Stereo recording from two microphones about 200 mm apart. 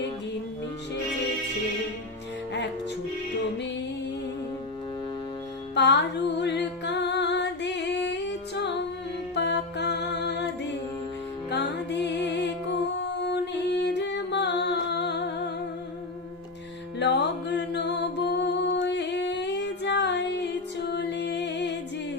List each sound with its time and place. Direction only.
5.7 s music: 60° left (ahead or behind)
17.0 s music: 60° left (ahead or behind)